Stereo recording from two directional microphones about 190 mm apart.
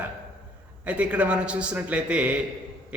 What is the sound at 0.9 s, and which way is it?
A man's voice, 5° right (ahead or behind).